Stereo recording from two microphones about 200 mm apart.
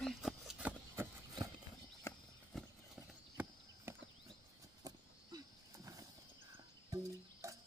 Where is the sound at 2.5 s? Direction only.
Centre (ahead or behind).